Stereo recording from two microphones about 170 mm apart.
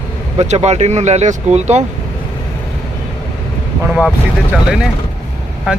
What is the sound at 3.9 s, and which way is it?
Speech, 5° right (ahead or behind).